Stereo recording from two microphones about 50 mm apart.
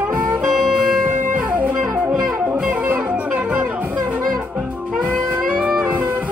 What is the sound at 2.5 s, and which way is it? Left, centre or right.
Music, right.